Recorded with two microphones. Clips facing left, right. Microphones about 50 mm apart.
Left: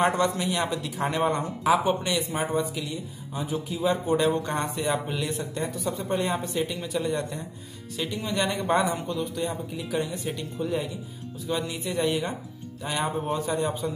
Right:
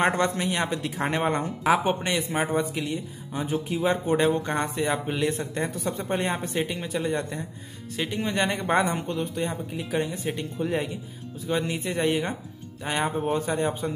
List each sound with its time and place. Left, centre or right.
0.0 s a man's voice: right
4.3 s speech: right
5.2 s a man's voice: right